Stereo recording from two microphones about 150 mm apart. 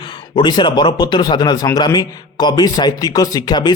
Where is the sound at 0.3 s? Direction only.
30° left (ahead or behind).